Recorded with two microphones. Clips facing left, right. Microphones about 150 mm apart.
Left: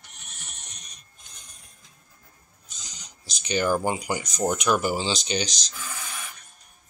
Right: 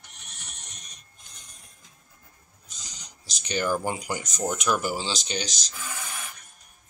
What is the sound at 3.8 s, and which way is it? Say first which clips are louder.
Speech: left 3 dB; 10° left (ahead or behind).